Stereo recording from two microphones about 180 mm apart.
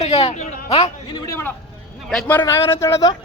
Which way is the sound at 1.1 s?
15° left (ahead or behind).